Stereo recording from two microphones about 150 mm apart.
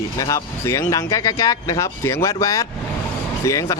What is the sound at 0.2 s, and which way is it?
Speech, 20° left (ahead or behind).